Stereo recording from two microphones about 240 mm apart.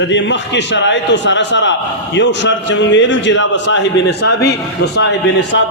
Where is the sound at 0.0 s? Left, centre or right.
Left.